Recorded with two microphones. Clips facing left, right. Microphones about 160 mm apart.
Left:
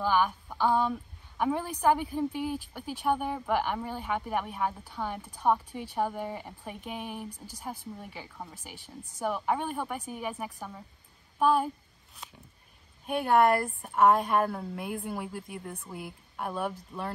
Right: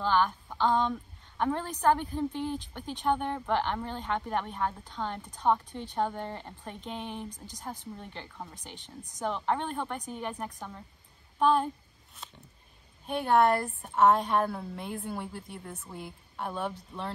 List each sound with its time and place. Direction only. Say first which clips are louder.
0.0 s a sound: even; 10° left (ahead or behind)
1.4 s a woman's voice: left 1 dB; 10° left (ahead or behind)
13.0 s a woman's voice: left 1 dB; 10° left (ahead or behind)